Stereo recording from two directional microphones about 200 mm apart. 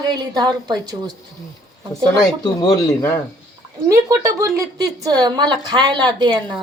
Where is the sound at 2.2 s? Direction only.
20° left (ahead or behind).